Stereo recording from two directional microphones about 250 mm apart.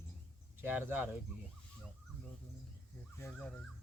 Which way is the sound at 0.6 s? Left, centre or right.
Centre.